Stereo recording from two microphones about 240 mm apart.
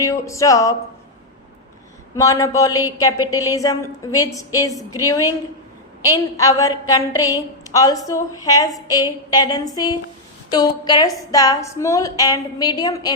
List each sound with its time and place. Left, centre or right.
0.0 s a woman's voice: centre
2.1 s a woman's voice: centre